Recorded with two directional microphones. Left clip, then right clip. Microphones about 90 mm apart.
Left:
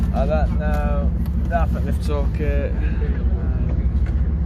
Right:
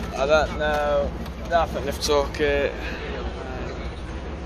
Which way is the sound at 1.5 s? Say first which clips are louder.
Right 3 dB; 40° right (ahead or behind).